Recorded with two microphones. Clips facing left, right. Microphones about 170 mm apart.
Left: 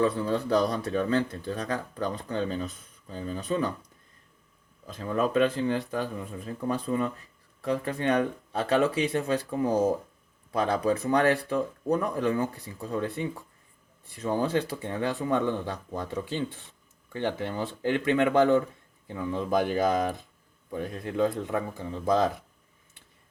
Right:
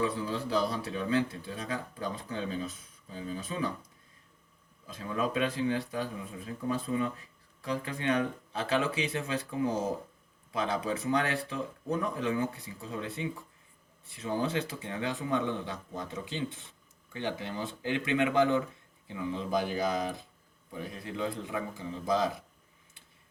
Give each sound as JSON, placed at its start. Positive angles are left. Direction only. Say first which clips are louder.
{"t": 0.0, "sound": "speech", "louder": "left 6 dB", "side_deg": 60}
{"t": 4.9, "sound": "speech", "louder": "left 6 dB", "side_deg": 55}
{"t": 10.6, "sound": "speech", "louder": "left 6 dB", "side_deg": 55}
{"t": 11.0, "sound": "speech", "louder": "left 6 dB", "side_deg": 40}
{"t": 11.5, "sound": "speech", "louder": "left 7 dB", "side_deg": 55}